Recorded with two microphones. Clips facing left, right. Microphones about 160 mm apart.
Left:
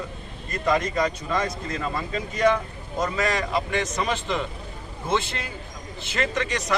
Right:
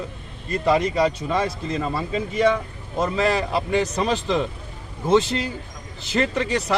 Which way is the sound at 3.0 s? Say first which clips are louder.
Right 4 dB; 30° right (ahead or behind).